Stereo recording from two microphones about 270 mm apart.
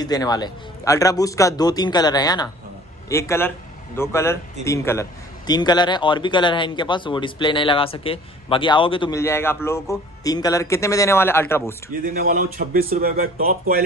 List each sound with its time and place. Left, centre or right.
0.0 s speech: centre
11.9 s speech: right